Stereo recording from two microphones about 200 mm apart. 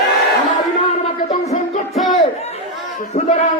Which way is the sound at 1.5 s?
35° left (ahead or behind).